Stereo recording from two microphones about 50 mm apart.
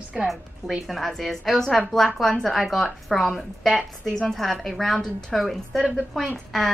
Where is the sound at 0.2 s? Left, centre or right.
Centre.